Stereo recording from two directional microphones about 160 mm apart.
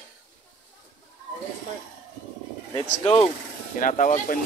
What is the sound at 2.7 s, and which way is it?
Speech, 35° left (ahead or behind).